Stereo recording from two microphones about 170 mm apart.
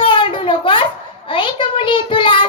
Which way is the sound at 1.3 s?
30° left (ahead or behind).